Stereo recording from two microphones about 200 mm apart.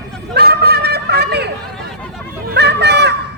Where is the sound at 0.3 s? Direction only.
50° right (ahead or behind).